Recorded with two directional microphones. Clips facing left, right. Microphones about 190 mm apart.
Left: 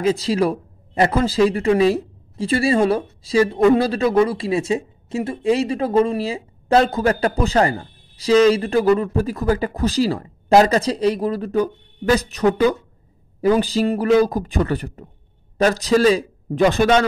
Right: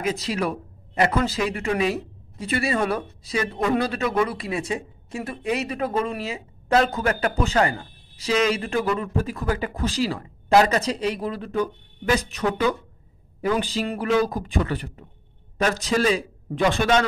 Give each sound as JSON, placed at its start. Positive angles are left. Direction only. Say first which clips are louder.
{"t": 0.0, "sound": "a man's voice", "louder": "left 7 dB", "side_deg": 30}